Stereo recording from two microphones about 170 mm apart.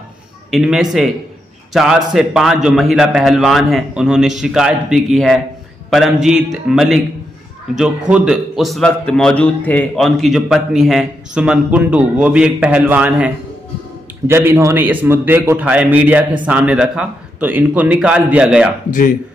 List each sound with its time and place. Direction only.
0.5 s a man's voice: 5° right (ahead or behind)
18.9 s speech: 50° left (ahead or behind)